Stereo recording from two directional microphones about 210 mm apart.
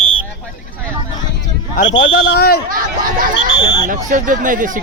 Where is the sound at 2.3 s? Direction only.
45° left (ahead or behind).